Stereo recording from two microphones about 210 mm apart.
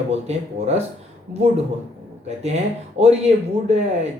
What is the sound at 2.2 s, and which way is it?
Speech, 30° right (ahead or behind).